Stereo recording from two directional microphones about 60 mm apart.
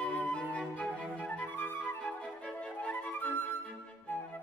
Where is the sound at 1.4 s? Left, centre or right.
Left.